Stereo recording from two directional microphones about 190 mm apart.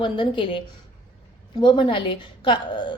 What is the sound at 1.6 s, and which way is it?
Speech, 25° left (ahead or behind).